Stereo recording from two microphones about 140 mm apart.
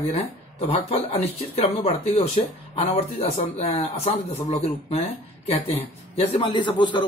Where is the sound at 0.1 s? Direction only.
50° left (ahead or behind).